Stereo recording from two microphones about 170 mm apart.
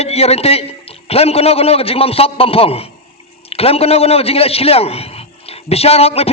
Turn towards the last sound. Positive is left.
turn(degrees=35)  # may be behind; listen again after turning